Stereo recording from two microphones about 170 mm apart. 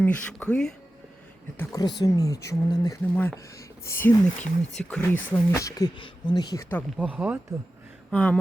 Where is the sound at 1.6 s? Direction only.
20° left (ahead or behind).